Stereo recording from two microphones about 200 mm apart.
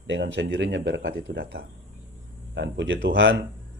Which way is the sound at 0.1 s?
65° right (ahead or behind).